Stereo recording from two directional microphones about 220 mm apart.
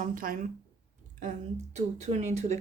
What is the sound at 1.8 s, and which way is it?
Speech, 30° right (ahead or behind).